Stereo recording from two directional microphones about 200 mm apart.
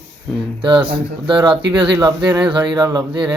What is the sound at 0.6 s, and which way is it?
Speech, 25° right (ahead or behind).